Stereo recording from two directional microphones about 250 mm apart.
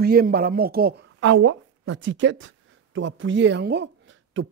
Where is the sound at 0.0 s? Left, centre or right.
Right.